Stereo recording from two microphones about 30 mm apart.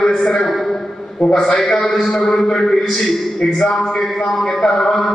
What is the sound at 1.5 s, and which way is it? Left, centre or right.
A man's voice, centre.